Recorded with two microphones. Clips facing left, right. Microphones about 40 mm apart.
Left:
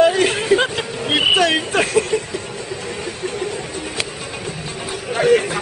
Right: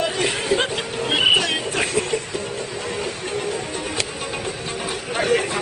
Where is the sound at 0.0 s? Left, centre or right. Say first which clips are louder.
Left 8 dB; left.